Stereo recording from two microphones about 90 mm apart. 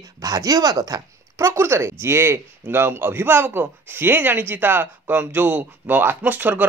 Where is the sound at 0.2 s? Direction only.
45° right (ahead or behind).